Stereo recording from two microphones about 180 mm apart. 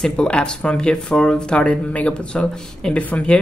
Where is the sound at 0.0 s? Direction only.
5° left (ahead or behind).